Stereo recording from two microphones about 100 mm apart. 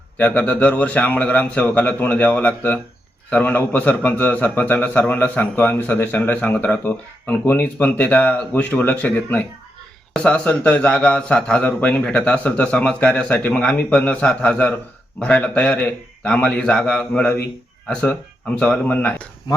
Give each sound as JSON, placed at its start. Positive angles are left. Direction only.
{"t": 0.2, "sound": "a man's voice", "side_deg": 15}